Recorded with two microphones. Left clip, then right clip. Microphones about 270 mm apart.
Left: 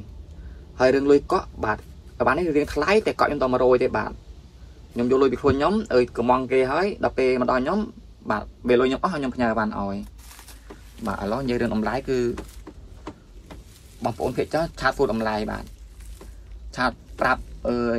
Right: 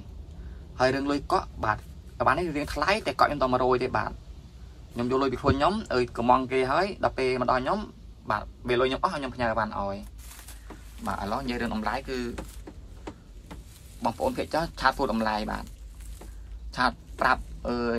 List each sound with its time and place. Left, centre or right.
0.7 s speech: centre
14.0 s speech: centre
16.7 s speech: centre